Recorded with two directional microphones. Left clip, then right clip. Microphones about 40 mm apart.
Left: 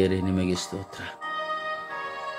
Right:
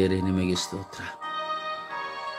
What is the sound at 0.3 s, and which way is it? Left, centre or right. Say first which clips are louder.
Speech: even; right.